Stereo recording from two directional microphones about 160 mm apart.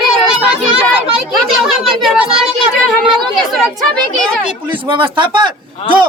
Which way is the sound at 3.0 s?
Centre (ahead or behind).